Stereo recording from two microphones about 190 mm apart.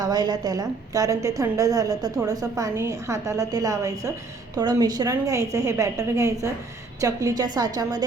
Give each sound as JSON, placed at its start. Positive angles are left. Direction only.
{"t": 0.0, "sound": "a woman's voice", "side_deg": -20}